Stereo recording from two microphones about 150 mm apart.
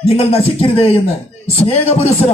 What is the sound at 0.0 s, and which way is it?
A man's voice, 40° left (ahead or behind).